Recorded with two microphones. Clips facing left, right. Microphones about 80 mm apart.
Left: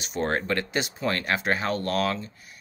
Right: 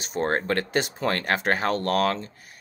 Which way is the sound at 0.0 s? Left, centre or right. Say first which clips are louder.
Right 2 dB; right.